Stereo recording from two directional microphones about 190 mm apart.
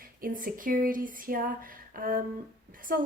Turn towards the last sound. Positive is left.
turn(degrees=-50)  # may be behind; listen again after turning